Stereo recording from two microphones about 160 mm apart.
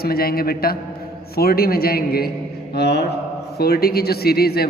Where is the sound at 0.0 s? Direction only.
70° left (ahead or behind).